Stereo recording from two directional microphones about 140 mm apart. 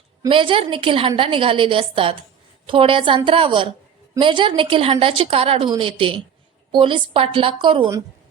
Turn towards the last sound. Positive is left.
turn(degrees=-35)  # may be behind; listen again after turning